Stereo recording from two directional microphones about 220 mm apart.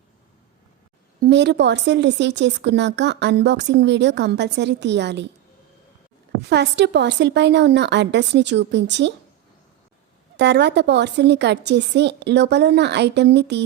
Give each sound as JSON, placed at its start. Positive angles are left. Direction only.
{"t": 1.2, "sound": "a woman's voice", "side_deg": -50}
{"t": 6.5, "sound": "a woman's voice", "side_deg": -50}
{"t": 10.3, "sound": "a woman's voice", "side_deg": -50}